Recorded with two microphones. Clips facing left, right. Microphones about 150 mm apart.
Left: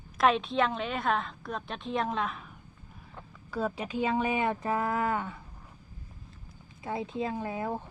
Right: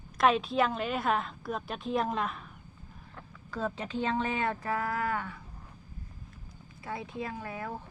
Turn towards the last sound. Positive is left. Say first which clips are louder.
# left 5 dB
turn(degrees=25)  # may be behind; listen again after turning